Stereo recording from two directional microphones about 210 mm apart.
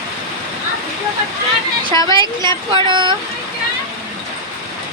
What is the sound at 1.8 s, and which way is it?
Speech, 20° right (ahead or behind).